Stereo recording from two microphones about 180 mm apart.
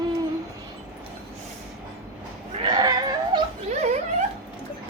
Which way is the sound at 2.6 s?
25° right (ahead or behind).